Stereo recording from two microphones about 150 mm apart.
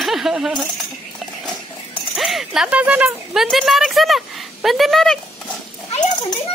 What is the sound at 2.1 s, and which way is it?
Speech, centre (ahead or behind).